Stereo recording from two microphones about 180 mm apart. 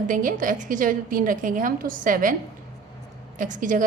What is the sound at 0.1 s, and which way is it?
A woman's voice, 50° right (ahead or behind).